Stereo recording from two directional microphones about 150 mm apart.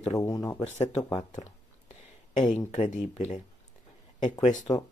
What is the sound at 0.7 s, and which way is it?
Speech, 50° left (ahead or behind).